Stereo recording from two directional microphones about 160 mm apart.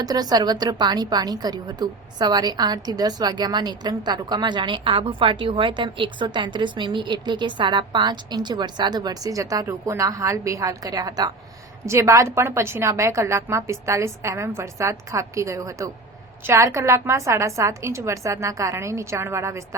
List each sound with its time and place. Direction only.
0.0 s a woman's voice: 25° right (ahead or behind)